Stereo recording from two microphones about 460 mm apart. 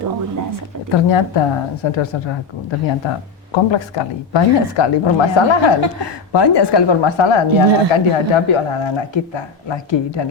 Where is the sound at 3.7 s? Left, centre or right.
Left.